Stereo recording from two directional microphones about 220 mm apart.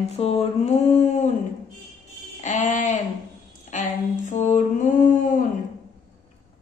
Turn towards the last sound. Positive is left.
turn(degrees=35)  # may be behind; listen again after turning